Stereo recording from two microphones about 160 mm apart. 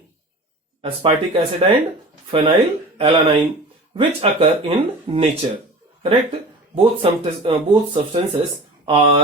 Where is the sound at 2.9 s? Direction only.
35° right (ahead or behind).